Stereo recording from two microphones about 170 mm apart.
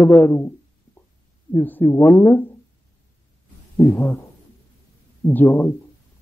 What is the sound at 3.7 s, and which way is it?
Speech, 15° left (ahead or behind).